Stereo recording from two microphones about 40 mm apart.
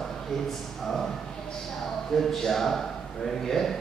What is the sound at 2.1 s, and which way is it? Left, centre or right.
Speech, centre.